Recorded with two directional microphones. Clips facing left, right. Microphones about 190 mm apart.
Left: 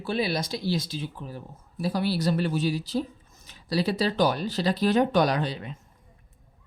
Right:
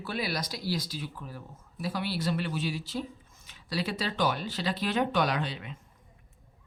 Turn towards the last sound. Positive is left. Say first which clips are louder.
# left 5 dB
turn(degrees=40)  # may be behind; listen again after turning